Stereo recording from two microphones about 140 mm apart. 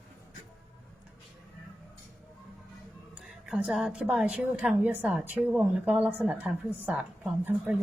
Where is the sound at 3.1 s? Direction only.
10° right (ahead or behind).